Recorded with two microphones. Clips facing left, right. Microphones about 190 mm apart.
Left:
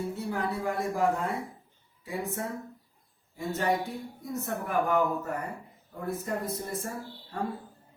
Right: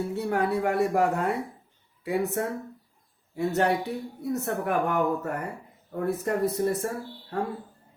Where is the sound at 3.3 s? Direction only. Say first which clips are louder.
Right 4 dB; 70° right (ahead or behind).